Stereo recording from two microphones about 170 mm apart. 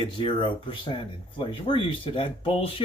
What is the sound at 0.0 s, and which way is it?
Speech, 30° left (ahead or behind).